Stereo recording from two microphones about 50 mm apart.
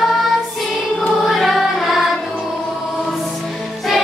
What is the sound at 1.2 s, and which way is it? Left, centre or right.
Music, centre.